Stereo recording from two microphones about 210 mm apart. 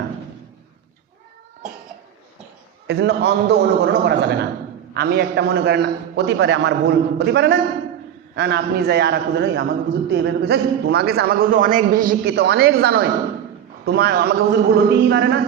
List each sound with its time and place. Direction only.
2.8 s a man's voice: 55° right (ahead or behind)